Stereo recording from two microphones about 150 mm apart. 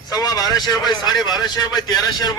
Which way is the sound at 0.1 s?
25° left (ahead or behind).